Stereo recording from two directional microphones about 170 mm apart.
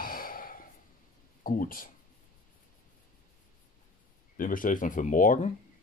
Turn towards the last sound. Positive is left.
turn(degrees=50)  # may be behind; listen again after turning